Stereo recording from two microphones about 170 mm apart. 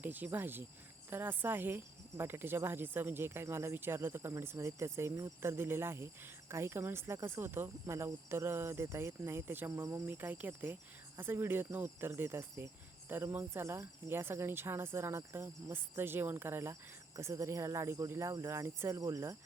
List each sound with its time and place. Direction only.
0.0 s speech: 10° right (ahead or behind)